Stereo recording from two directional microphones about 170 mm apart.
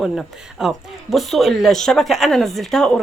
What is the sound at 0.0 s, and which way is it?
Speech, centre (ahead or behind).